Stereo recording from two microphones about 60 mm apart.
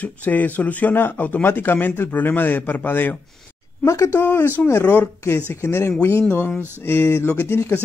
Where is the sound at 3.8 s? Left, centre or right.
Left.